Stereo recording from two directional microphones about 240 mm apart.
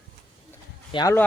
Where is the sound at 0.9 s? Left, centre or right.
Centre.